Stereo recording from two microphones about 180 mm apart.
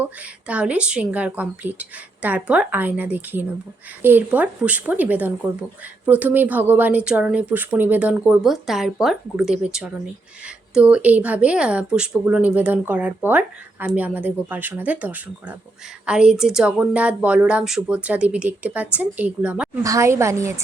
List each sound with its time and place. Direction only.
0.0 s speech: 10° right (ahead or behind)
19.8 s speech: 15° right (ahead or behind)